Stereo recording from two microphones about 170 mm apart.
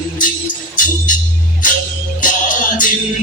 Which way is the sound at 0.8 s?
50° left (ahead or behind).